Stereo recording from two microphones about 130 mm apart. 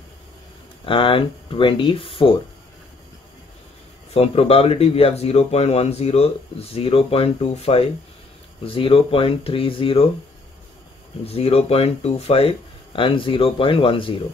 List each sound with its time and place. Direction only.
0.8 s speech: 40° left (ahead or behind)
4.1 s speech: 50° left (ahead or behind)
11.2 s speech: 50° left (ahead or behind)